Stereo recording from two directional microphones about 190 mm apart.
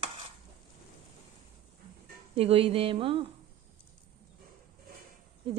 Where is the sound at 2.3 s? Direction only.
30° right (ahead or behind).